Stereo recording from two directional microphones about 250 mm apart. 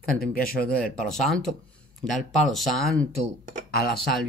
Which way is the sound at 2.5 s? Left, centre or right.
Centre.